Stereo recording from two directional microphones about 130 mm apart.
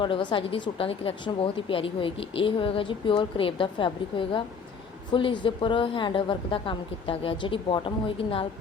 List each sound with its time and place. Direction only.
0.0 s speech: 35° left (ahead or behind)